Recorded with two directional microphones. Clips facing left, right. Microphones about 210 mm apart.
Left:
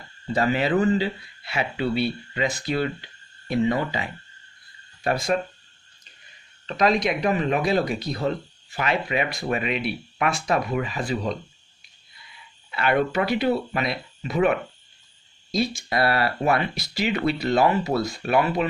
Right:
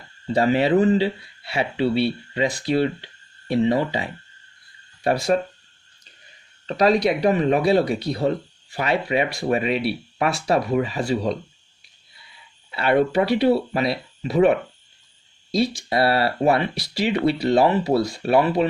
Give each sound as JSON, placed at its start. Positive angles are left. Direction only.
{"t": 0.3, "sound": "speech", "side_deg": -30}
{"t": 6.7, "sound": "speech", "side_deg": -35}
{"t": 12.7, "sound": "speech", "side_deg": -30}